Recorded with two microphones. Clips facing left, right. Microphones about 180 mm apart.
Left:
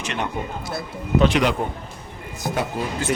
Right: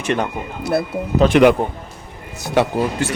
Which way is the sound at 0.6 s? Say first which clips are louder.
Right 10 dB; 65° right (ahead or behind).